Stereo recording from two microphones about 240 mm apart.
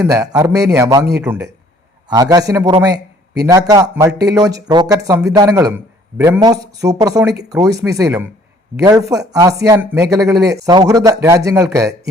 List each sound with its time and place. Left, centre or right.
0.0 s speech: centre
2.0 s a man's voice: centre